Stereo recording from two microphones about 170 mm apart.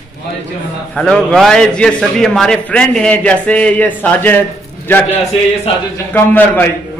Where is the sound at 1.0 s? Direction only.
5° left (ahead or behind).